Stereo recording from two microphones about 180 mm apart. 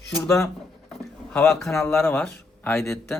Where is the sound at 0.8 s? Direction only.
5° left (ahead or behind).